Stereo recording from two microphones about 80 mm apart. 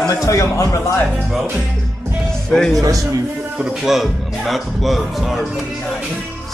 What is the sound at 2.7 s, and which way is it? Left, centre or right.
Speech, right.